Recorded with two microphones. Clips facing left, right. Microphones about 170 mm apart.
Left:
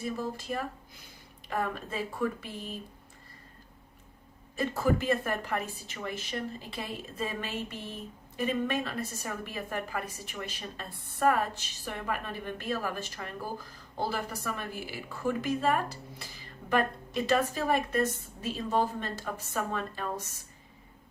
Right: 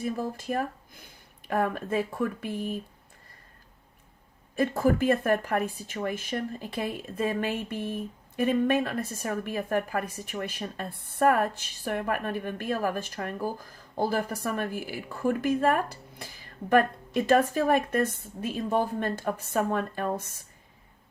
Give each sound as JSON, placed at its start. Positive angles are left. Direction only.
{"t": 0.0, "sound": "speech", "side_deg": -50}
{"t": 4.5, "sound": "a woman's voice", "side_deg": -55}